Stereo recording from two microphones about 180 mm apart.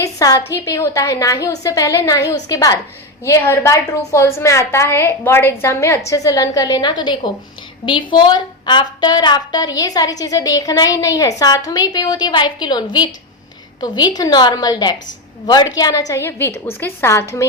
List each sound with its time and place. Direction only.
0.0 s a woman's voice: 20° left (ahead or behind)